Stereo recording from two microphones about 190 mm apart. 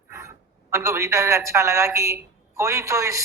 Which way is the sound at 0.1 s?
15° right (ahead or behind).